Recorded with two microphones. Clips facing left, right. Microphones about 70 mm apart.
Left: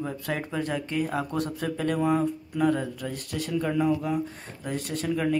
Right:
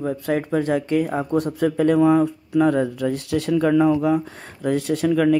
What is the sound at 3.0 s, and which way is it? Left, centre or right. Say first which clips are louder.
Speech: right 10 dB; right.